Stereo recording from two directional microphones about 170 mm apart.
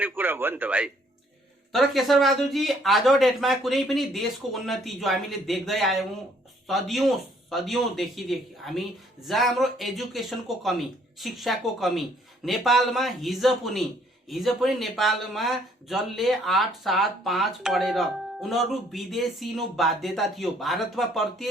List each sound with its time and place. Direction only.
0.0 s speech: 10° right (ahead or behind)